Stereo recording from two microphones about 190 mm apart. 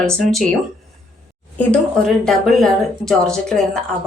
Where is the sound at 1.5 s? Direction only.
5° left (ahead or behind).